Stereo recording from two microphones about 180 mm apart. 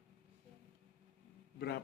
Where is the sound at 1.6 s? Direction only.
60° left (ahead or behind).